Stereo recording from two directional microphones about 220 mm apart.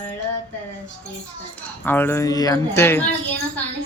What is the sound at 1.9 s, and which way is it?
Speech, 10° left (ahead or behind).